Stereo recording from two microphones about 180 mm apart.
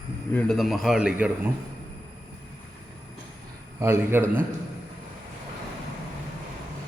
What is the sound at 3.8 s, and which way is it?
Speech, 15° right (ahead or behind).